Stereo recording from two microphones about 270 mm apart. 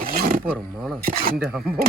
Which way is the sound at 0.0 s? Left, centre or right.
Right.